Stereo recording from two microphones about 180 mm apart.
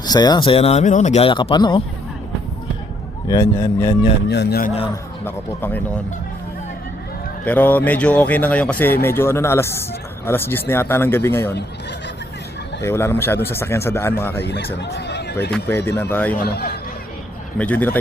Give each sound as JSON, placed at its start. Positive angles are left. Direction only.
{"t": 0.0, "sound": "speech", "side_deg": 20}
{"t": 3.2, "sound": "speech", "side_deg": 15}
{"t": 4.3, "sound": "speech", "side_deg": 70}
{"t": 5.2, "sound": "speech", "side_deg": 10}
{"t": 7.4, "sound": "speech", "side_deg": 10}
{"t": 12.8, "sound": "speech", "side_deg": 15}
{"t": 14.5, "sound": "speech", "side_deg": 70}
{"t": 15.5, "sound": "speech", "side_deg": 10}
{"t": 16.4, "sound": "speech", "side_deg": 60}
{"t": 17.6, "sound": "speech", "side_deg": 10}